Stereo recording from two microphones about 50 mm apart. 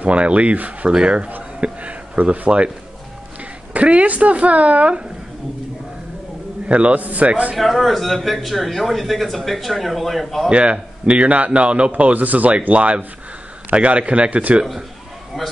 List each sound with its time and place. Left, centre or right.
0.0 s a man's voice: right
3.7 s a man's voice: right
6.7 s a man's voice: right
7.5 s speech: centre
10.5 s a man's voice: right